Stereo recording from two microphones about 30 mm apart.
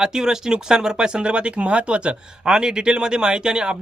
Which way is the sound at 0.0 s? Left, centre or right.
Centre.